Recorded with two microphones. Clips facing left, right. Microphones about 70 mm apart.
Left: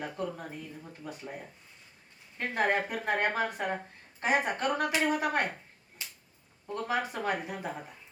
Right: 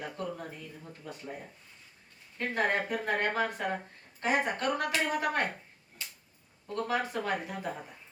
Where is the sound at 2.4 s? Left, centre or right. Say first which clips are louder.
Left 1 dB; left.